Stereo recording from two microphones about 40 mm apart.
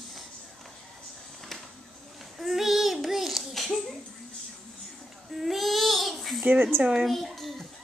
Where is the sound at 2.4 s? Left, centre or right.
Centre.